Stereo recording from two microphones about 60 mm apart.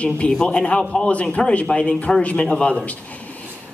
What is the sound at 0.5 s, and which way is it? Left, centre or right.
A man's voice, centre.